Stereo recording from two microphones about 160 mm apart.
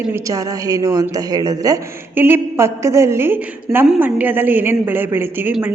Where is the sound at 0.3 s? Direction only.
20° right (ahead or behind).